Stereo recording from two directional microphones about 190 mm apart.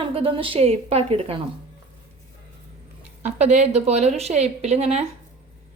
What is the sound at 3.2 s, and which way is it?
A woman's voice, 40° right (ahead or behind).